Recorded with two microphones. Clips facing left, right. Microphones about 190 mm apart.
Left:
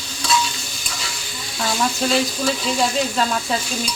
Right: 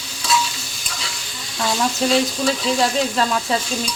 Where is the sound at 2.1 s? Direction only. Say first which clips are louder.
Right 2 dB; centre (ahead or behind).